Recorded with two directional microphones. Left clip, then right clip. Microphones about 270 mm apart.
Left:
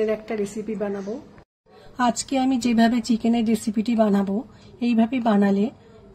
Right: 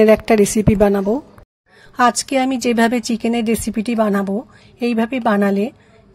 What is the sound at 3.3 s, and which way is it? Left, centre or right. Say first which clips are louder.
Speech: right 5 dB; right.